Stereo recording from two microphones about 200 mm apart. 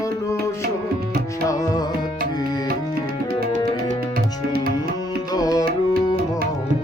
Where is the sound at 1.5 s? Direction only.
15° left (ahead or behind).